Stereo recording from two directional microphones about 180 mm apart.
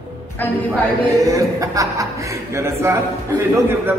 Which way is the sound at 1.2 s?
20° right (ahead or behind).